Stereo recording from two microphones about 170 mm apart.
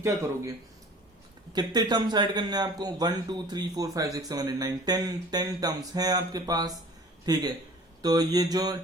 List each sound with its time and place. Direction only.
0.0 s speech: 20° right (ahead or behind)
1.5 s speech: 25° right (ahead or behind)